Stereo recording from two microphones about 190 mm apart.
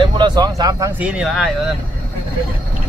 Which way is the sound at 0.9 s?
5° right (ahead or behind).